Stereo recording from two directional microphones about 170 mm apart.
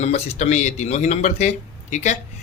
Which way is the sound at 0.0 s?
40° left (ahead or behind).